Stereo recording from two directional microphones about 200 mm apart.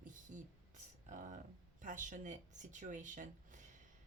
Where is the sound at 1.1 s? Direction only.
40° right (ahead or behind).